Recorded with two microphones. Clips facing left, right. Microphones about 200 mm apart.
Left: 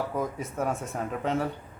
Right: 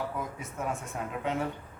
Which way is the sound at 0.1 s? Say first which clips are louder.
Left 6 dB; 40° left (ahead or behind).